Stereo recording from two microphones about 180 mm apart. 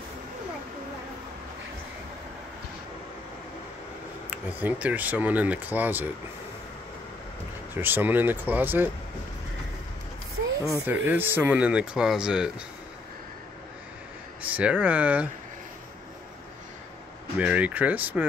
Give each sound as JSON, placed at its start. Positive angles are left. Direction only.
{"t": 4.3, "sound": "speech", "side_deg": -10}
{"t": 7.7, "sound": "speech", "side_deg": -10}
{"t": 10.7, "sound": "speech", "side_deg": -10}
{"t": 14.5, "sound": "speech", "side_deg": -5}
{"t": 17.4, "sound": "speech", "side_deg": -5}